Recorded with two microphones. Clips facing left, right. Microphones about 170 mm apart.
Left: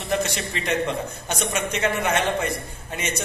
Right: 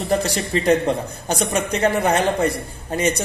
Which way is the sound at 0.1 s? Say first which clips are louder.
Right 4 dB; 35° right (ahead or behind).